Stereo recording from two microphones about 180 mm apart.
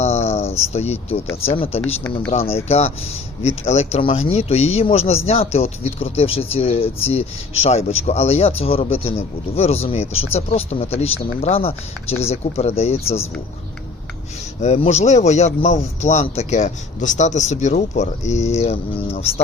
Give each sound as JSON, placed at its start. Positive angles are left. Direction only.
{"t": 0.0, "sound": "cricket", "side_deg": 35}
{"t": 0.7, "sound": "speech", "side_deg": 35}
{"t": 14.6, "sound": "speech", "side_deg": 35}